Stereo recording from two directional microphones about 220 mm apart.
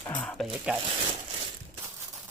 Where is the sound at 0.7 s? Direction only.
5° right (ahead or behind).